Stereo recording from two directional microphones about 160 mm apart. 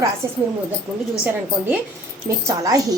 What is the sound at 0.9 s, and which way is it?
Speech, 15° right (ahead or behind).